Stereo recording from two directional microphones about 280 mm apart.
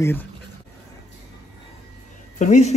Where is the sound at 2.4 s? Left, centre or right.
Left.